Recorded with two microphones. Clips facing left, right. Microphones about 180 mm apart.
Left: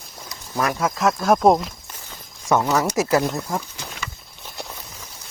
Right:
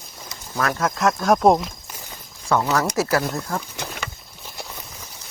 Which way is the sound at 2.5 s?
15° left (ahead or behind).